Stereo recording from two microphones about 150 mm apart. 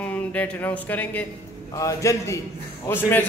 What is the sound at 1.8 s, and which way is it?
Speech, 20° left (ahead or behind).